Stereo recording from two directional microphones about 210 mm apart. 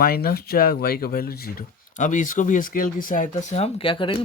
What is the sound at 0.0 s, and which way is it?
Speech, 45° left (ahead or behind).